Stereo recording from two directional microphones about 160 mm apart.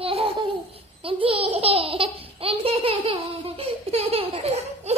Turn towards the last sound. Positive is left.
turn(degrees=-40)  # may be behind; listen again after turning